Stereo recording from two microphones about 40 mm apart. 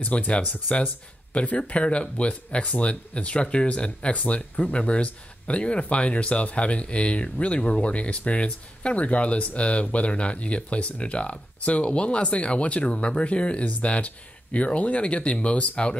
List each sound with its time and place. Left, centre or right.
0.0 s speech: left
1.3 s speech: left